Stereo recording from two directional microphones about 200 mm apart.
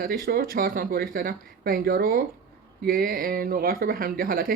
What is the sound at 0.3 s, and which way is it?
A woman's voice, 50° right (ahead or behind).